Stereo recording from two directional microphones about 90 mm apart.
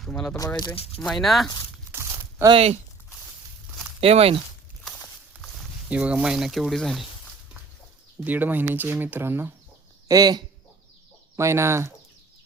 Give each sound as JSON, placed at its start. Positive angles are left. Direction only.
{"t": 0.1, "sound": "speech", "side_deg": 10}
{"t": 0.3, "sound": "speech", "side_deg": 45}
{"t": 0.9, "sound": "speech", "side_deg": 5}
{"t": 1.9, "sound": "crumpling", "side_deg": -20}
{"t": 4.0, "sound": "speech", "side_deg": -90}
{"t": 5.9, "sound": "speech", "side_deg": -15}
{"t": 8.2, "sound": "speech", "side_deg": -20}
{"t": 10.1, "sound": "speech", "side_deg": -45}
{"t": 11.3, "sound": "speech", "side_deg": -30}